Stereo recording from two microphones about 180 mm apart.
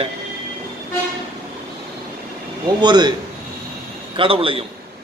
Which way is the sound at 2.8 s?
25° right (ahead or behind).